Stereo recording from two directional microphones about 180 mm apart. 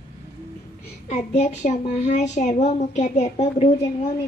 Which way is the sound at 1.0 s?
40° left (ahead or behind).